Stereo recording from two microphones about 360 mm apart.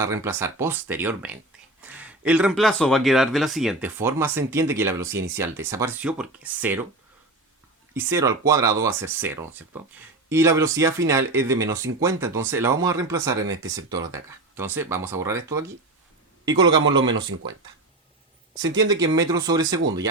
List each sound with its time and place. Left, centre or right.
0.0 s speech: centre
7.9 s speech: centre
13.5 s speech: right
13.7 s speech: centre
16.5 s speech: centre
16.8 s speech: right
18.5 s speech: centre